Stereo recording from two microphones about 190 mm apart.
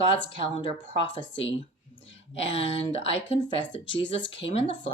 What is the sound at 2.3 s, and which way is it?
Speech, 30° left (ahead or behind).